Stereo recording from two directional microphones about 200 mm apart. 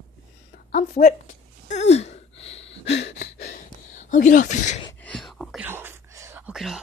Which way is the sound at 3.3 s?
45° left (ahead or behind).